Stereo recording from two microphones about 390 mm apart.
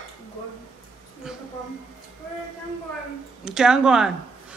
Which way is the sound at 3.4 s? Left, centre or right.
Centre.